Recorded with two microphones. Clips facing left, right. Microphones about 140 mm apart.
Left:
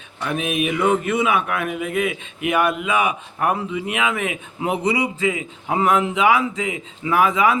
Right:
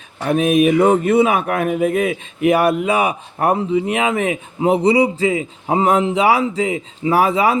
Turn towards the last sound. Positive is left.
turn(degrees=-35)  # may be behind; listen again after turning